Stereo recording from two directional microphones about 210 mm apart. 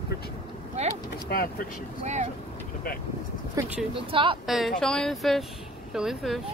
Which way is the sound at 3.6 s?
15° right (ahead or behind).